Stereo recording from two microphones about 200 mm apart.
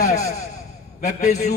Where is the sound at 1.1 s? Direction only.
35° left (ahead or behind).